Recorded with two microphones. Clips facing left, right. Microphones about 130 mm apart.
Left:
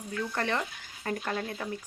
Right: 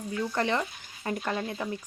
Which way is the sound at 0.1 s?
20° right (ahead or behind).